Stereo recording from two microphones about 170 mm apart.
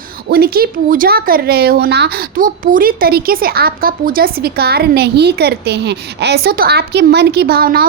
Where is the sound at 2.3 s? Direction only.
55° right (ahead or behind).